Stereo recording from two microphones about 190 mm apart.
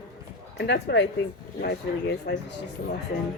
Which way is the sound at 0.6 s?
65° left (ahead or behind).